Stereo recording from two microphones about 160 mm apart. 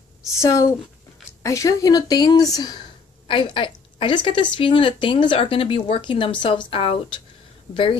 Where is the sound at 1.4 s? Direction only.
20° left (ahead or behind).